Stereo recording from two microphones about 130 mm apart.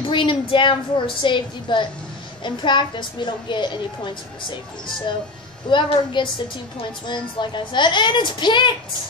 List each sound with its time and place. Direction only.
0.1 s a woman's voice: 40° left (ahead or behind)
5.7 s a woman's voice: 35° left (ahead or behind)